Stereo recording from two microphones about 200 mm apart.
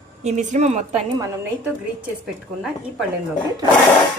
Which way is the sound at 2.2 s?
5° right (ahead or behind).